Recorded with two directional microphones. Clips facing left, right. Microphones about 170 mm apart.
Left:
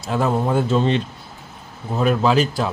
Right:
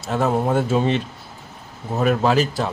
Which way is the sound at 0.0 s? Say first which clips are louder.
Even; centre (ahead or behind).